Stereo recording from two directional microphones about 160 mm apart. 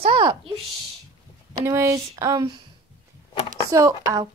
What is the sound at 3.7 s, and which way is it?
Speech, 20° right (ahead or behind).